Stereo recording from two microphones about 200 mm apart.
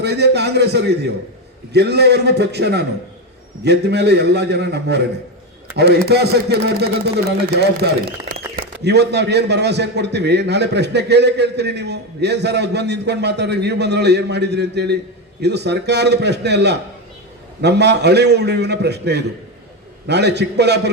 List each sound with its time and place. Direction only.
0.0 s a man's voice: 55° right (ahead or behind)